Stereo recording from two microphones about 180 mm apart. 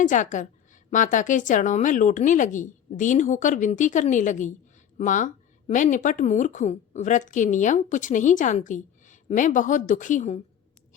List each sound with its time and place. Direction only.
0.0 s a woman's voice: 45° left (ahead or behind)